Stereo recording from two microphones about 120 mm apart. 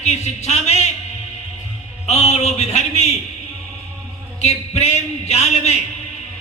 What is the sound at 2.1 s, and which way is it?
A man's voice, 65° left (ahead or behind).